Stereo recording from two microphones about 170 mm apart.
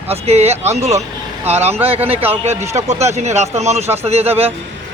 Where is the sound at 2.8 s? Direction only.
40° right (ahead or behind).